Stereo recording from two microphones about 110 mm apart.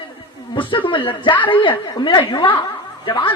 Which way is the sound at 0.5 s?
50° left (ahead or behind).